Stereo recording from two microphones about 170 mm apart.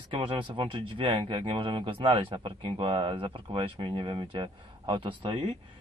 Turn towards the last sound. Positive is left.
turn(degrees=-30)  # may be behind; listen again after turning